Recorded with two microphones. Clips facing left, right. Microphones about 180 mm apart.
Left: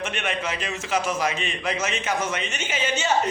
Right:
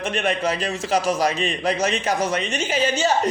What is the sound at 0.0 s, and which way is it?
A man's voice, 35° right (ahead or behind).